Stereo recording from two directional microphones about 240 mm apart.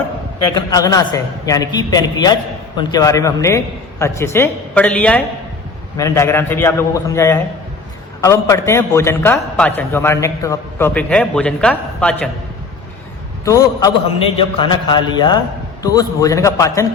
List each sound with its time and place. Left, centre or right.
0.5 s a man's voice: centre
13.4 s a man's voice: centre